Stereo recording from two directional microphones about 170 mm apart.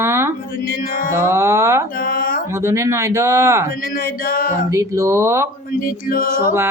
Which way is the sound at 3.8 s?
55° left (ahead or behind).